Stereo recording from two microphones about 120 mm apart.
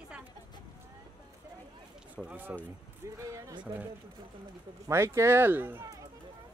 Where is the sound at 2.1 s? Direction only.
10° right (ahead or behind).